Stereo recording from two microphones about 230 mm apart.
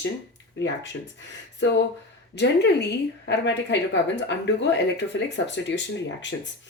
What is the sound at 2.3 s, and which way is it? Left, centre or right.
Speech, left.